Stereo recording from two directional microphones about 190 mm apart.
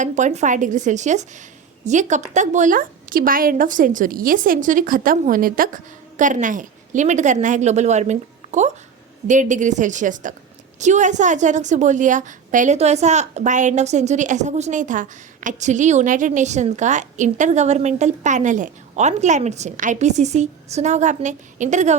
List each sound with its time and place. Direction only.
0.0 s a woman's voice: 40° right (ahead or behind)